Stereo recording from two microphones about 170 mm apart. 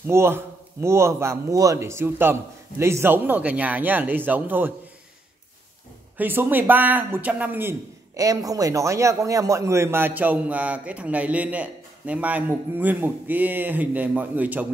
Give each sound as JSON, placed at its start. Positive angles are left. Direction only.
{"t": 0.0, "sound": "a man's voice", "side_deg": -15}
{"t": 6.1, "sound": "a man's voice", "side_deg": -10}